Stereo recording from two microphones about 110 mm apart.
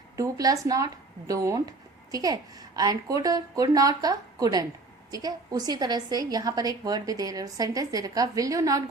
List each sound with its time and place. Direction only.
0.2 s a woman's voice: 30° right (ahead or behind)